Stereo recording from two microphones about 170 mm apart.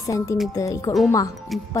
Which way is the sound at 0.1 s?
20° left (ahead or behind).